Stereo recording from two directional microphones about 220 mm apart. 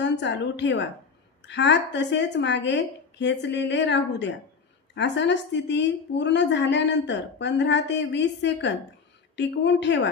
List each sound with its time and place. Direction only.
0.0 s a woman's voice: 55° left (ahead or behind)